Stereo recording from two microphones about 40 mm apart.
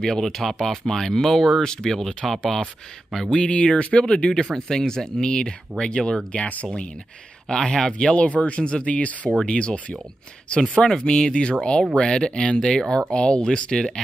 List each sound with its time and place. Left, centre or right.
0.0 s speech: centre
3.3 s speech: left
6.3 s speech: left
7.4 s speech: centre
8.1 s speech: left; by 14.0 s centre